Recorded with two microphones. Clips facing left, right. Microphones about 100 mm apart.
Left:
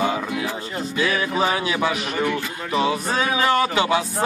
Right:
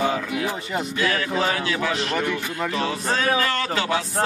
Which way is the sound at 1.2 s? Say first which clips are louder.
Left 2 dB; 20° left (ahead or behind).